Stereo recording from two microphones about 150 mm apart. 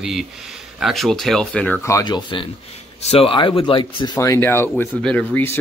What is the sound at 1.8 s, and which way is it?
Speech, 25° left (ahead or behind).